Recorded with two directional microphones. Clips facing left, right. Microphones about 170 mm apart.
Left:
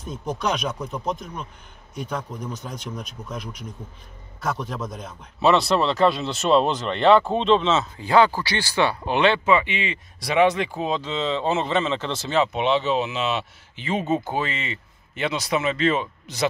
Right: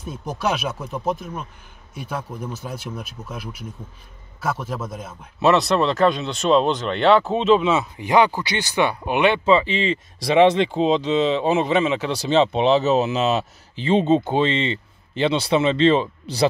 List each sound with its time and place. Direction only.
0.0 s speech: 5° right (ahead or behind)
9.5 s speech: 30° right (ahead or behind)
12.5 s speech: 40° right (ahead or behind)